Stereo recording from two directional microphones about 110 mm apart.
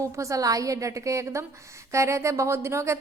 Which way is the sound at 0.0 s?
30° right (ahead or behind).